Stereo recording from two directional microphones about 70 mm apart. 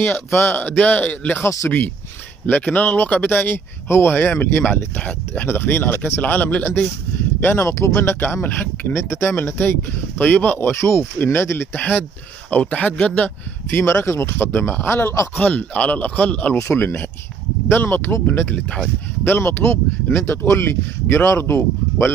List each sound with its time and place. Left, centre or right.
0.3 s speech: left
1.4 s speech: left
2.4 s speech: left
4.9 s speech: centre
5.5 s speech: left
7.6 s speech: left
11.7 s speech: left
13.7 s speech: left
15.4 s speech: centre
16.5 s speech: left